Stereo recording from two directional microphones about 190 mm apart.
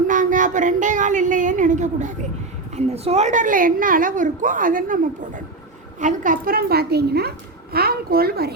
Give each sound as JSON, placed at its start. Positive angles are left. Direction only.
{"t": 0.1, "sound": "a woman's voice", "side_deg": -40}